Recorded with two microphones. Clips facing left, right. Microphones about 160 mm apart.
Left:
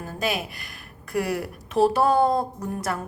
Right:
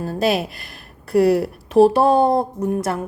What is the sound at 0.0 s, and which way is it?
Speech, 35° right (ahead or behind).